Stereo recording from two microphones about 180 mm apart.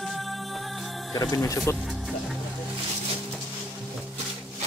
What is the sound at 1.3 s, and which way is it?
Speech, 15° left (ahead or behind).